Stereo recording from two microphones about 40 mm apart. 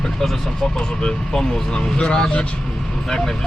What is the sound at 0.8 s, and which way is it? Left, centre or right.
Speech, centre.